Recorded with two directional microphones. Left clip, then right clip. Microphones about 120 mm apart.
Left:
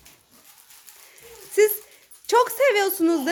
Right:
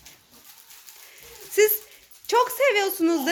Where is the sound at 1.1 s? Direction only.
15° left (ahead or behind).